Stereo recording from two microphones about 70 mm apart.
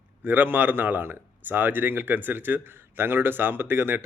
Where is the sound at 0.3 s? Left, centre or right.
Right.